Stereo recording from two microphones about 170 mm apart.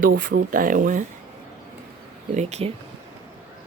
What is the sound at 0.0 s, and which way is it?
Speech, 55° right (ahead or behind).